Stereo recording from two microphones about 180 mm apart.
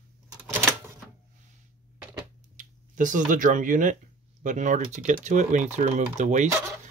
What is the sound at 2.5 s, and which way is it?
Speech, 45° right (ahead or behind).